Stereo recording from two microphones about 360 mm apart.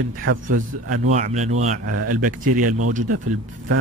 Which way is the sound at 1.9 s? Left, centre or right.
Right.